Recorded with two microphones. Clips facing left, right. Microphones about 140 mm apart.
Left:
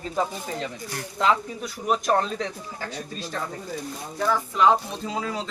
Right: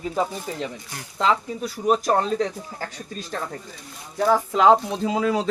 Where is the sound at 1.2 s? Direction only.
30° right (ahead or behind).